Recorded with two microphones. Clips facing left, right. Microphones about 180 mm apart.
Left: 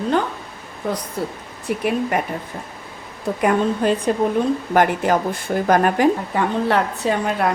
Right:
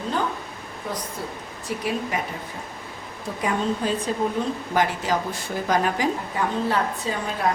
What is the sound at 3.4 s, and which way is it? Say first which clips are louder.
A woman's voice: left 6 dB; 60° left (ahead or behind).